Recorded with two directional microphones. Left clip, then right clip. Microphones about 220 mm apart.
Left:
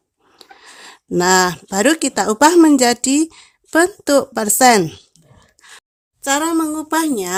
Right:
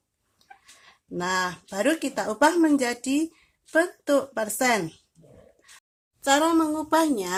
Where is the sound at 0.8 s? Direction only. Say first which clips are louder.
Left 13 dB; 50° left (ahead or behind).